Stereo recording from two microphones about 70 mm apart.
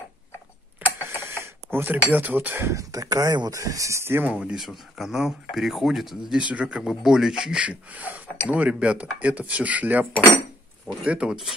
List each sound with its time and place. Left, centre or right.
0.8 s mechanisms: right
1.3 s speech: right
2.7 s speech: right
4.3 s speech: centre
4.6 s speech: centre
6.3 s speech: centre
6.8 s speech: centre; by 10.0 s right
11.1 s speech: centre